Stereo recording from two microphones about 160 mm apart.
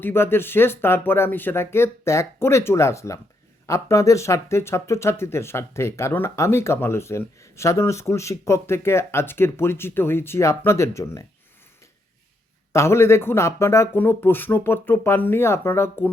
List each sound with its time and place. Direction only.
0.0 s speech: 15° left (ahead or behind)
12.7 s speech: 15° left (ahead or behind)